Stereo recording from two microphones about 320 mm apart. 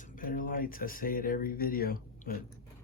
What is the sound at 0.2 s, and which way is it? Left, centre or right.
Speech, left.